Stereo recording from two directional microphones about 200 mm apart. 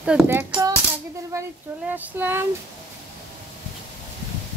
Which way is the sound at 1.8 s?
10° right (ahead or behind).